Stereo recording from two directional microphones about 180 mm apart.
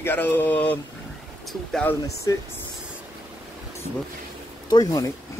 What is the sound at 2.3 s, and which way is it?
Speech, 20° left (ahead or behind).